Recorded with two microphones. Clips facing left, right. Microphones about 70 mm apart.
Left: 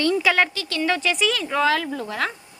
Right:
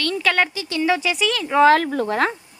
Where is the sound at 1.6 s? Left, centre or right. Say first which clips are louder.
Right 9 dB; right.